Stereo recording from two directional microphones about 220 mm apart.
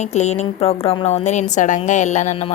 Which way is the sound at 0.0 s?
30° left (ahead or behind).